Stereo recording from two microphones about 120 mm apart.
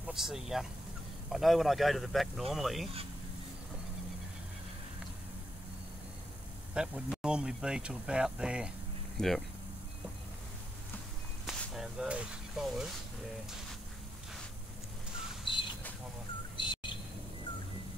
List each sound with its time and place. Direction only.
0.0 s speech: 5° right (ahead or behind)
6.7 s speech: 5° right (ahead or behind)
11.4 s whip: 5° right (ahead or behind)
12.6 s speech: 5° right (ahead or behind)
15.5 s a sound: 45° left (ahead or behind)
16.5 s bird: 40° left (ahead or behind)